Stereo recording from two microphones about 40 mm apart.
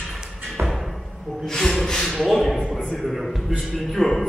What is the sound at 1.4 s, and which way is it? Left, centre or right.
Gasp, centre.